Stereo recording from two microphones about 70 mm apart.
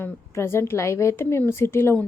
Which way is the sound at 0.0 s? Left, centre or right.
Left.